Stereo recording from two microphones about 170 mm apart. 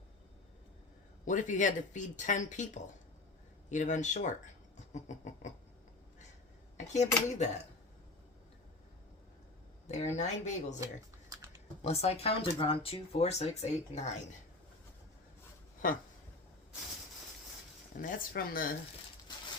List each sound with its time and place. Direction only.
1.2 s speech: 45° left (ahead or behind)
6.7 s speech: 45° left (ahead or behind)
9.8 s speech: 45° left (ahead or behind)
11.8 s speech: 40° left (ahead or behind)
15.8 s speech: 55° left (ahead or behind)
17.9 s speech: 55° left (ahead or behind)